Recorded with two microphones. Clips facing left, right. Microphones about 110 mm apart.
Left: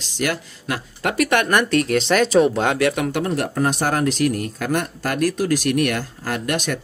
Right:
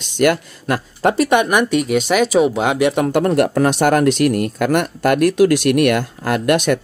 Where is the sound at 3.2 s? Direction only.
80° right.